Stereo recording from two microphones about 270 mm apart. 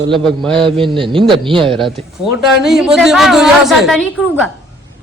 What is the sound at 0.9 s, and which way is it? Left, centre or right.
Speech, centre.